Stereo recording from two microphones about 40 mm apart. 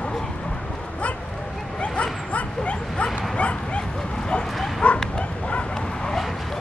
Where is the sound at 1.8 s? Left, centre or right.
Left.